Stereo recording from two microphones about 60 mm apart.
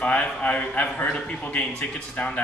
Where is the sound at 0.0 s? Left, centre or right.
Left.